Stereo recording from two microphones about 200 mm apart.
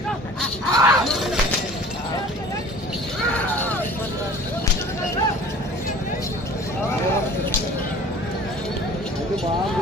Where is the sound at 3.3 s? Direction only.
10° left (ahead or behind).